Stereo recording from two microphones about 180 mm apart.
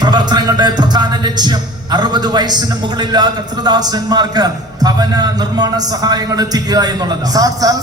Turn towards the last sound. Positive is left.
turn(degrees=-20)  # may be behind; listen again after turning